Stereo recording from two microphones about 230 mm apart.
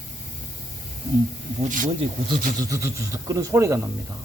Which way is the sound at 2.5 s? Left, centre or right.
Centre.